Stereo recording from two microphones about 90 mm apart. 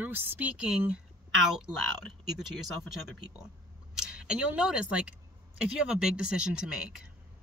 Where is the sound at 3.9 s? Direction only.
10° right (ahead or behind).